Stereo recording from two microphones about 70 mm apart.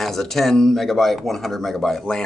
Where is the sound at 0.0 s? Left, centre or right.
Centre.